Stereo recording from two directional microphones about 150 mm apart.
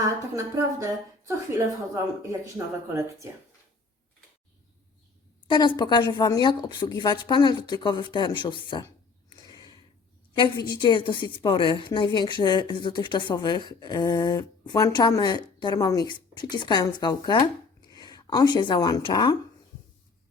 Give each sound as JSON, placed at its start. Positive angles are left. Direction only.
{"t": 0.0, "sound": "speech", "side_deg": -20}
{"t": 2.2, "sound": "speech", "side_deg": -20}
{"t": 5.5, "sound": "speech", "side_deg": 30}
{"t": 9.3, "sound": "a sound", "side_deg": 30}
{"t": 10.3, "sound": "a woman's voice", "side_deg": 30}